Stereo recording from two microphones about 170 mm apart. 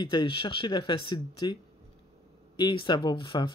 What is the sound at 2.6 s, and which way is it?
Speech, 25° left (ahead or behind).